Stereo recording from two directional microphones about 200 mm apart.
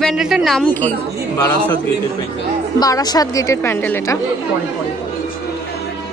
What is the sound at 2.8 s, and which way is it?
A woman's voice, 20° left (ahead or behind).